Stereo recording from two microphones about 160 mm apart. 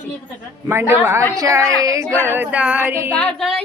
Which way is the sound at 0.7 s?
15° right (ahead or behind).